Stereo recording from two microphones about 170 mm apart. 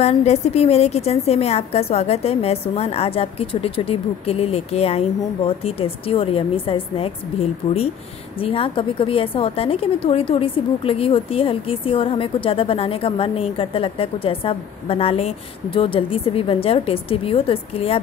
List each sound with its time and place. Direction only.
0.0 s a woman's voice: 40° left (ahead or behind)